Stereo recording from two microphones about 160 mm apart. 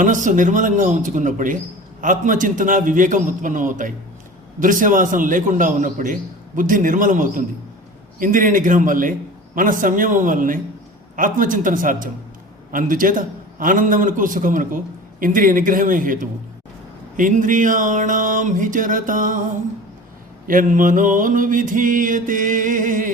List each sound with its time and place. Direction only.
0.0 s speech: 55° right (ahead or behind)
2.0 s mantra: 55° right (ahead or behind)
20.5 s mantra: 55° right (ahead or behind)